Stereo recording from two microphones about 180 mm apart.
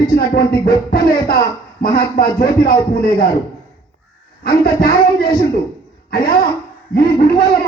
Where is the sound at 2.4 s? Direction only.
55° left (ahead or behind).